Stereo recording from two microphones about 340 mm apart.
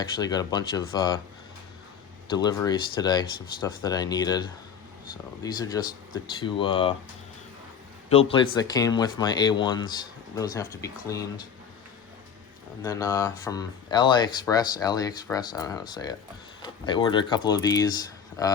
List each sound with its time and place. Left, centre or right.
0.2 s speech: centre
2.3 s speech: centre
8.1 s speech: centre
12.8 s speech: centre